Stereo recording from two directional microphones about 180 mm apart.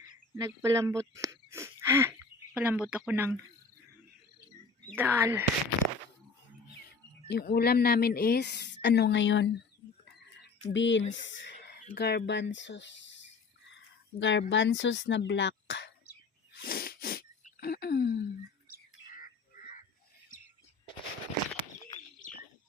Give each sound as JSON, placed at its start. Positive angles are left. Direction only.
{"t": 0.3, "sound": "speech", "side_deg": -15}
{"t": 4.9, "sound": "speech", "side_deg": -15}
{"t": 7.3, "sound": "a woman's voice", "side_deg": 65}
{"t": 10.7, "sound": "speech", "side_deg": 90}
{"t": 11.9, "sound": "speech", "side_deg": 65}
{"t": 13.7, "sound": "a sound", "side_deg": 85}
{"t": 14.5, "sound": "speech", "side_deg": 90}
{"t": 16.6, "sound": "sneeze", "side_deg": 55}
{"t": 18.7, "sound": "a sound", "side_deg": 50}